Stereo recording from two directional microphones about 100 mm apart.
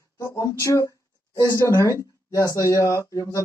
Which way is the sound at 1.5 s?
35° left (ahead or behind).